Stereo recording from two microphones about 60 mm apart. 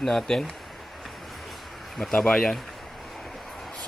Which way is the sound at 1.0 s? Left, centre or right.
Centre.